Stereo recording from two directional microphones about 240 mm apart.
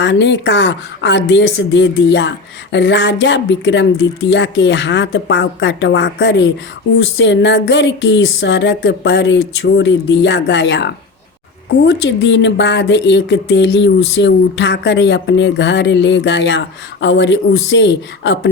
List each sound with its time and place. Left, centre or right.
0.0 s speech: left